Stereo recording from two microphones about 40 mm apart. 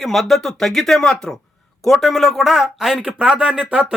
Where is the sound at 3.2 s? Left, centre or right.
Right.